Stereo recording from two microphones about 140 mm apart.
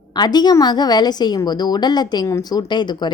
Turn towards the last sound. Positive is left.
turn(degrees=30)  # may be behind; listen again after turning